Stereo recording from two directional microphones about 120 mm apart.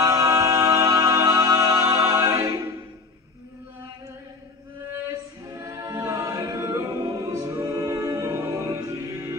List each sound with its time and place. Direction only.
0.0 s music: 25° right (ahead or behind)
5.5 s a capella: 25° right (ahead or behind)
7.7 s music: 25° right (ahead or behind)